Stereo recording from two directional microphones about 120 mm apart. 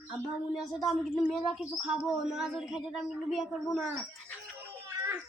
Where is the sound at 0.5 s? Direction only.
Centre (ahead or behind).